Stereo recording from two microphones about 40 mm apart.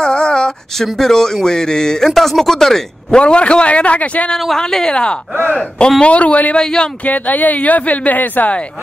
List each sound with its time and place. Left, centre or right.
0.0 s a sound: left
0.8 s speech: centre
3.1 s a man's voice: left
4.6 s speech: centre
6.1 s a man's voice: left
6.5 s speech: centre
7.1 s speech: left